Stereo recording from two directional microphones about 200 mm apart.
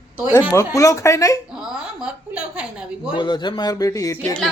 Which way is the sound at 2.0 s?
5° right (ahead or behind).